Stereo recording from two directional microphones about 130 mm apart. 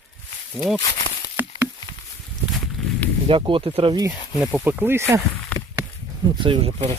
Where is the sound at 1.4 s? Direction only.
15° right (ahead or behind).